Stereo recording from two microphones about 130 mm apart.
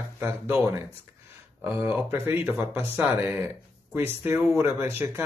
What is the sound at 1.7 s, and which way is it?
Speech, 20° right (ahead or behind).